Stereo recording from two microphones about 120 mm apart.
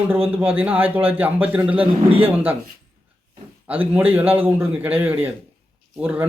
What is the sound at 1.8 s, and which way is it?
Speech, 50° right (ahead or behind).